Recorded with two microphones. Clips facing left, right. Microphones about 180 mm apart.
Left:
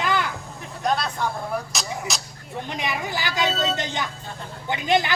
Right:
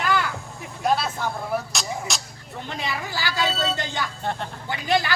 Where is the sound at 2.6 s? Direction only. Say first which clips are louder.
Left 1 dB; 15° left (ahead or behind).